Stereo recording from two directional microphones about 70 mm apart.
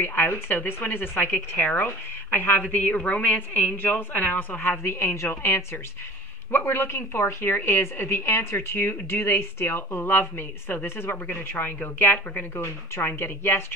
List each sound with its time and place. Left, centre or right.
0.0 s a woman's voice: left
4.8 s a woman's voice: left
12.5 s a woman's voice: left